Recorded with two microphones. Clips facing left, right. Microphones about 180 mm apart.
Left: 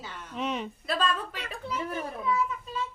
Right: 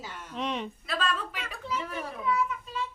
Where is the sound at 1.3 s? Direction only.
45° left (ahead or behind).